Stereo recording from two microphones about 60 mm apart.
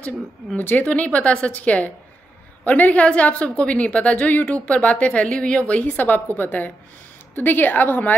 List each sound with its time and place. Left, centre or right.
0.6 s a woman's voice: left
5.8 s a woman's voice: left